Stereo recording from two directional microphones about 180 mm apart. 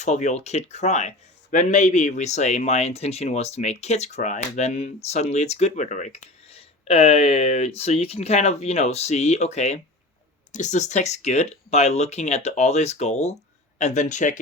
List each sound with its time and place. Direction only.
0.0 s speech: 40° left (ahead or behind)